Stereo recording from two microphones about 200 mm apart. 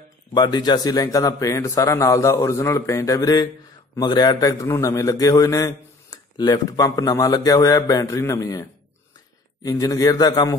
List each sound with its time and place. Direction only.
0.3 s a man's voice: 20° left (ahead or behind)